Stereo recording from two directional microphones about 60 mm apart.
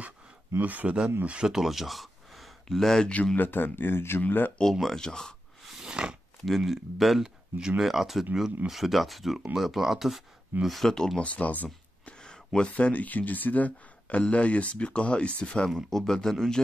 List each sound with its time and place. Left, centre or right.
0.6 s speech: right
1.5 s speech: centre
3.3 s speech: left
4.7 s speech: centre
5.7 s a sound: centre
6.4 s speech: centre
7.5 s speech: centre
7.8 s speech: centre
11.1 s speech: left
12.2 s a sound: centre
12.6 s speech: left
15.7 s speech: centre